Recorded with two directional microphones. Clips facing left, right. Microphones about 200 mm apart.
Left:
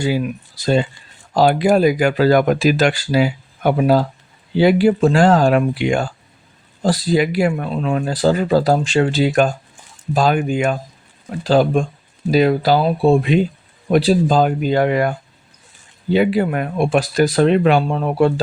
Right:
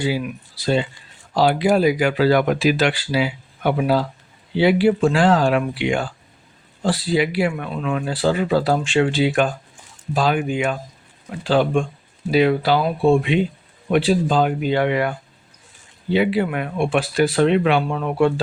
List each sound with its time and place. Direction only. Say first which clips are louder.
0.0 s speech: left 3 dB; 45° left (ahead or behind)